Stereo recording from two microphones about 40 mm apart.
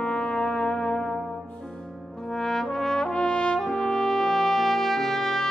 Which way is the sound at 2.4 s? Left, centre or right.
Centre.